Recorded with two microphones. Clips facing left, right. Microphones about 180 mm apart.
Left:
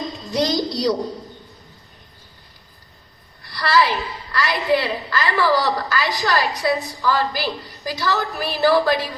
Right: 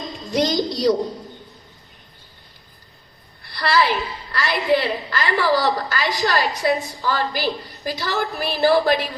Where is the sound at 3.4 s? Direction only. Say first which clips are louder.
Left 1 dB; 25° right (ahead or behind).